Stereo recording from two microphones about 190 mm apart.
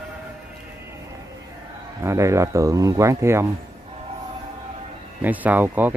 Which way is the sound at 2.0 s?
15° right (ahead or behind).